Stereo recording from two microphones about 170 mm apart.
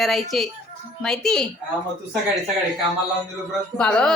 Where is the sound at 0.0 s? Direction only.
Centre (ahead or behind).